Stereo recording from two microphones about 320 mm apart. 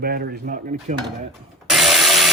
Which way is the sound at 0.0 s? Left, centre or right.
Right.